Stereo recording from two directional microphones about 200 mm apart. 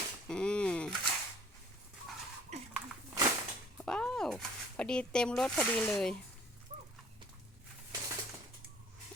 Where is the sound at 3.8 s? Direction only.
5° left (ahead or behind).